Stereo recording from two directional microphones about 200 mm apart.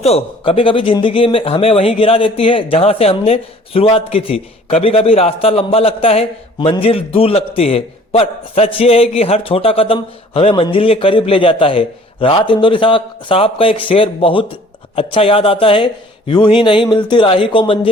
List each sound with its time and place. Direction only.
0.0 s speech: 30° left (ahead or behind)